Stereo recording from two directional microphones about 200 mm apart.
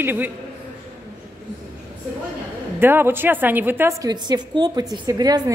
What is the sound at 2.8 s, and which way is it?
A woman's voice, 10° right (ahead or behind).